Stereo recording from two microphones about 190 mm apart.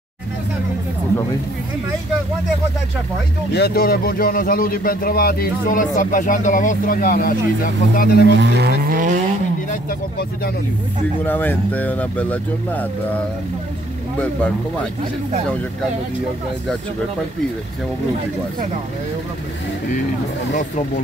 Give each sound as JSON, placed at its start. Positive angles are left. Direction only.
{"t": 3.5, "sound": "speech", "side_deg": 55}
{"t": 8.4, "sound": "speech", "side_deg": -60}
{"t": 9.7, "sound": "speech", "side_deg": 50}
{"t": 11.2, "sound": "speech", "side_deg": 10}